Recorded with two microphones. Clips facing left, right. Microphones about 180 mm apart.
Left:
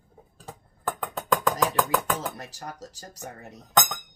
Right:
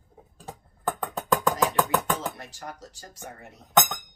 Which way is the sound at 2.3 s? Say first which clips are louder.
Left 1 dB; 40° left (ahead or behind).